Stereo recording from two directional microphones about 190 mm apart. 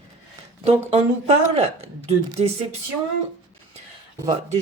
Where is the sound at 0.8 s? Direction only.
30° right (ahead or behind).